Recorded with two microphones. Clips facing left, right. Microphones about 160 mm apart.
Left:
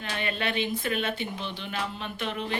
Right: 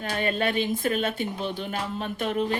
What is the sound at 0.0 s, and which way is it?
Speech, 45° right (ahead or behind).